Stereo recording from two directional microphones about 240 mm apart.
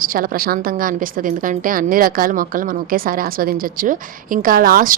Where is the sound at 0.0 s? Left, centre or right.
Right.